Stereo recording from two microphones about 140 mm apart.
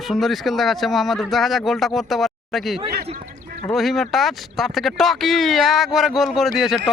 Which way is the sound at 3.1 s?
75° right (ahead or behind).